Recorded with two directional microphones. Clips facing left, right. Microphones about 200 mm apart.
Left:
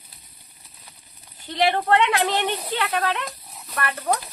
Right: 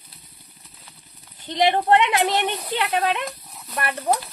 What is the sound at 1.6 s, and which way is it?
A woman's voice, 20° right (ahead or behind).